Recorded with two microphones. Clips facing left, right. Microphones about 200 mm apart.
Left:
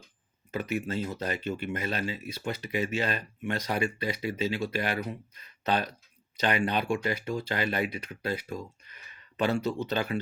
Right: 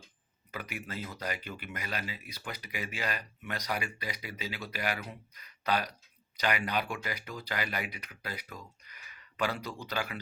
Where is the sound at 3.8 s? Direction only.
15° right (ahead or behind).